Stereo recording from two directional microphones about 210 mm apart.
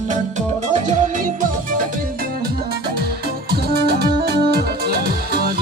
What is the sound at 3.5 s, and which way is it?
Music, 45° right (ahead or behind).